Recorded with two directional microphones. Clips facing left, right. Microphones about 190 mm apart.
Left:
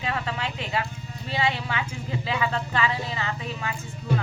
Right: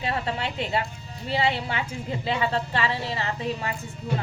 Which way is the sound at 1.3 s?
30° right (ahead or behind).